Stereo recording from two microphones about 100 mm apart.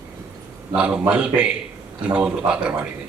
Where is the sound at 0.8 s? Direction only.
15° right (ahead or behind).